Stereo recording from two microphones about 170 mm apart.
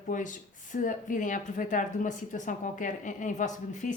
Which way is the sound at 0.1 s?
50° left (ahead or behind).